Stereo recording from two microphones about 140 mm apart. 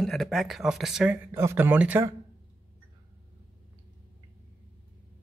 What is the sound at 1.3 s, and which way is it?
Speech, 15° right (ahead or behind).